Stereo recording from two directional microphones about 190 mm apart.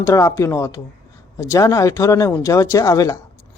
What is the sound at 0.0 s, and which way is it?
Speech, 15° left (ahead or behind).